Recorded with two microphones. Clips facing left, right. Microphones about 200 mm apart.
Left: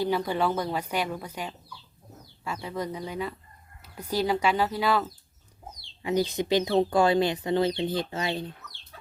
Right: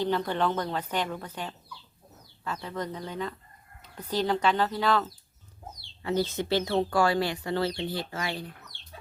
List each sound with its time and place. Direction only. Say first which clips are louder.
0.0 s speech: left 1 dB; 10° left (ahead or behind)